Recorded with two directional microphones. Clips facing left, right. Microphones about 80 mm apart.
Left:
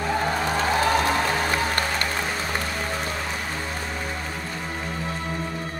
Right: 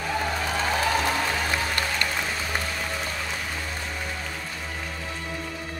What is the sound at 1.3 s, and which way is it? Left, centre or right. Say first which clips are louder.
Music: left 3 dB; left.